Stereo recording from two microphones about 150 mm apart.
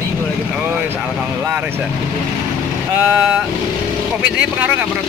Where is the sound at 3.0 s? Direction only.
5° right (ahead or behind).